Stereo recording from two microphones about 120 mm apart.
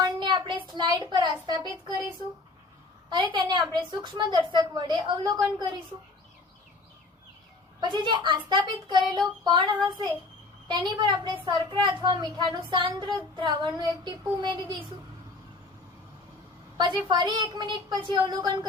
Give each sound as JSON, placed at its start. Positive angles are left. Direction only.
{"t": 0.2, "sound": "a sound", "side_deg": -40}
{"t": 3.1, "sound": "a woman's voice", "side_deg": -40}
{"t": 7.8, "sound": "a woman's voice", "side_deg": -40}
{"t": 17.1, "sound": "a woman's voice", "side_deg": -40}